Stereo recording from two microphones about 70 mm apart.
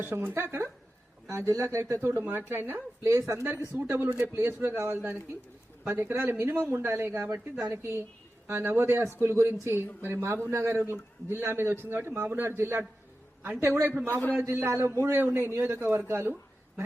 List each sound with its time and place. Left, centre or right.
0.0 s a woman's voice: right
1.3 s a woman's voice: right
3.1 s speech: right
3.7 s speech: right
4.2 s a woman's voice: right
14.4 s a woman's voice: right